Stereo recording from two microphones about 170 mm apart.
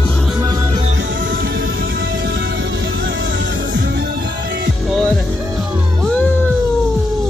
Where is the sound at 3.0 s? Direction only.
90° right.